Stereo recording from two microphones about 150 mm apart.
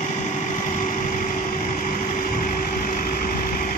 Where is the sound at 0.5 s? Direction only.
55° left (ahead or behind).